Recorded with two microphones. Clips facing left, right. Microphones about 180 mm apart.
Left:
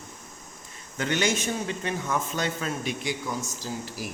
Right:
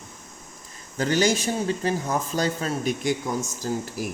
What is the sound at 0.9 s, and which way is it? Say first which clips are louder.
Speech: right 4 dB; 35° right (ahead or behind).